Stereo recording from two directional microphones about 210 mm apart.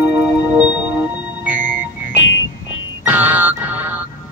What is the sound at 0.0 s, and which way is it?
Music, 5° right (ahead or behind).